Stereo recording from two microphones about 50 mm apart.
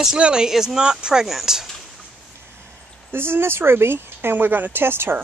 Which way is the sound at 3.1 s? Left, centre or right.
Right.